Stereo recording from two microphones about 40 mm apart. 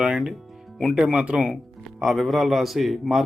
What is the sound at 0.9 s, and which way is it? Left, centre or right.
Speech, right.